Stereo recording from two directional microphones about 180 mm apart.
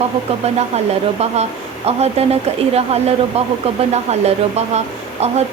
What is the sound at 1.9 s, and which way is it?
A woman's voice, 35° right (ahead or behind).